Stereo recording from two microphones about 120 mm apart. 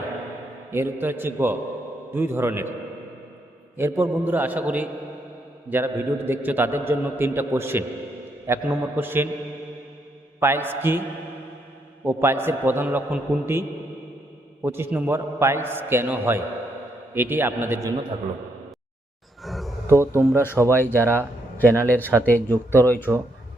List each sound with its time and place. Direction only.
0.7 s a man's voice: 20° right (ahead or behind)
3.8 s a man's voice: 20° right (ahead or behind)
10.4 s a man's voice: 20° right (ahead or behind)
12.0 s a man's voice: 20° right (ahead or behind)
19.4 s a sound: centre (ahead or behind)
20.3 s speech: 20° left (ahead or behind)